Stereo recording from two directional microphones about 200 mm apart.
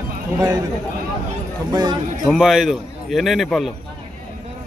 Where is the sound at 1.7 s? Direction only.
20° right (ahead or behind).